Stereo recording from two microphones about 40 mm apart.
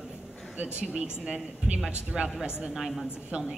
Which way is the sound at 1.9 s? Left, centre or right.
Right.